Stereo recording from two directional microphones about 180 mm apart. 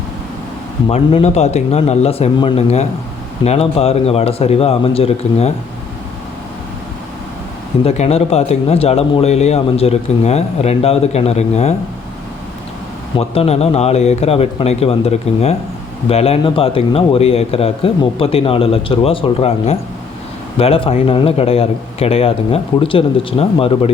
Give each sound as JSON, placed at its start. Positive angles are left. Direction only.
{"t": 0.9, "sound": "speech", "side_deg": 35}
{"t": 7.9, "sound": "speech", "side_deg": 35}
{"t": 13.1, "sound": "speech", "side_deg": 30}